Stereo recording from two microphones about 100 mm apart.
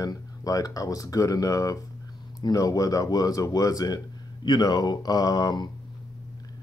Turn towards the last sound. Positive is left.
turn(degrees=45)  # may be behind; listen again after turning